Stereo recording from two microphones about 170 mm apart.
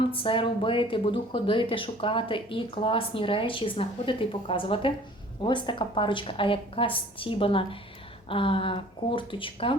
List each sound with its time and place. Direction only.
0.1 s speech: 30° left (ahead or behind)